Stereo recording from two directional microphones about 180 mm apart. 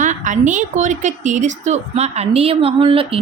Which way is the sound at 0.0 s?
45° right (ahead or behind).